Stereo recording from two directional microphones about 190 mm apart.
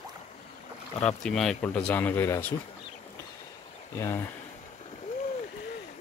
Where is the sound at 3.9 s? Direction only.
15° left (ahead or behind).